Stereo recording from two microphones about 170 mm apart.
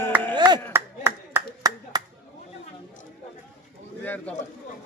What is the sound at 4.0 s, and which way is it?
Speech, 10° left (ahead or behind).